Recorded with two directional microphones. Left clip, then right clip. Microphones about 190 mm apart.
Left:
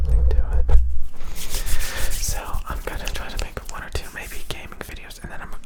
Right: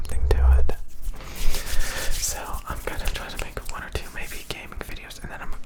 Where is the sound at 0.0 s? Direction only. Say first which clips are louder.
Right 5 dB; 25° right (ahead or behind).